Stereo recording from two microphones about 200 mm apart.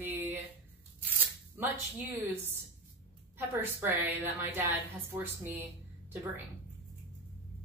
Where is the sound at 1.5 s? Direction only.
10° right (ahead or behind).